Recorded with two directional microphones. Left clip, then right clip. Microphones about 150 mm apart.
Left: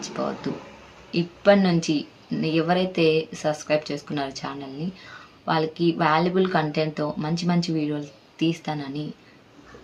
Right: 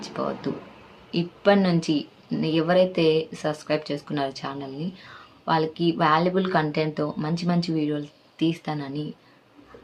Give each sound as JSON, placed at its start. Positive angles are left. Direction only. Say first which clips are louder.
{"t": 0.2, "sound": "a woman's voice", "louder": "even", "side_deg": -15}